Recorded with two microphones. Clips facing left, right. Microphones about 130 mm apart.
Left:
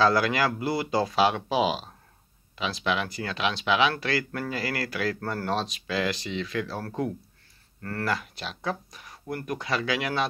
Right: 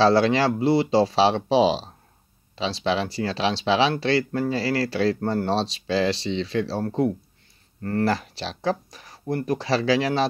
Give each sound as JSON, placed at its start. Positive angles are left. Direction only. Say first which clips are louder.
{"t": 0.0, "sound": "speech", "louder": "right 5 dB", "side_deg": -30}